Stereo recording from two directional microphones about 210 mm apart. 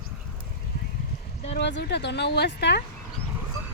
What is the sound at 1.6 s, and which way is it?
Speech, 55° left (ahead or behind).